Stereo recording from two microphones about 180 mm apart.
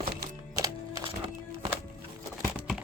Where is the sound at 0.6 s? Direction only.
20° right (ahead or behind).